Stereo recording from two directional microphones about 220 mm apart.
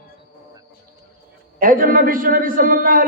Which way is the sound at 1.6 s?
40° right (ahead or behind).